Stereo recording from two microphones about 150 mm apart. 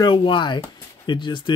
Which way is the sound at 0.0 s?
35° left (ahead or behind).